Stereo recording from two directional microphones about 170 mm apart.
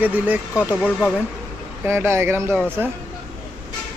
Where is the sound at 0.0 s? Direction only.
10° right (ahead or behind).